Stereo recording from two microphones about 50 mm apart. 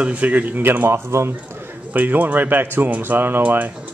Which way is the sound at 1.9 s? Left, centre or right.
Right.